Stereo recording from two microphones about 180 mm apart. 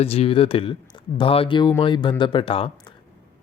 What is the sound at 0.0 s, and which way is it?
Speech, 35° left (ahead or behind).